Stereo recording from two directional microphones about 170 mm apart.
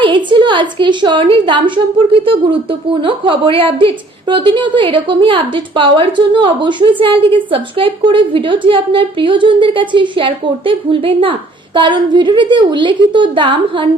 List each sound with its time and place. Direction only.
0.3 s a woman's voice: 30° right (ahead or behind)